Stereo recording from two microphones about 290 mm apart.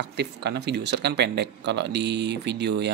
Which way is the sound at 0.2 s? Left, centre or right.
Right.